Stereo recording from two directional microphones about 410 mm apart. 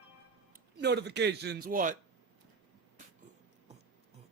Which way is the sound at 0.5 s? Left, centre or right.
Right.